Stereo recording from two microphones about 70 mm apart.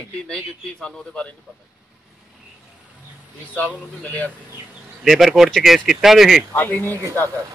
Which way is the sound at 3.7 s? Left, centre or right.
Left.